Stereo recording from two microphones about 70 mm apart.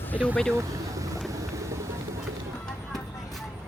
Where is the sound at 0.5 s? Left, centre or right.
Right.